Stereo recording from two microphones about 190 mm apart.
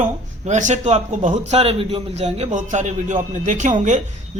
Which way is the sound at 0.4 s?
35° right (ahead or behind).